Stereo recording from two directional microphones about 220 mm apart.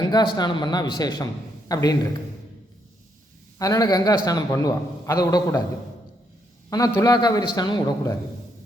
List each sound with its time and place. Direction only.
0.3 s a man's voice: 20° left (ahead or behind)
3.6 s a man's voice: 15° left (ahead or behind)
6.7 s a man's voice: 15° left (ahead or behind)